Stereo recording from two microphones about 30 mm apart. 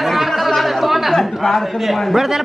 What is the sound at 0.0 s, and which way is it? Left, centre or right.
Chatter, centre.